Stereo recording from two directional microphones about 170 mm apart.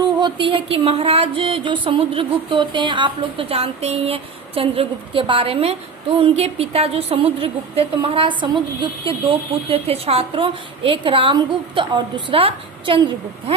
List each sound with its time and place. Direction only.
0.2 s a woman's voice: 30° right (ahead or behind)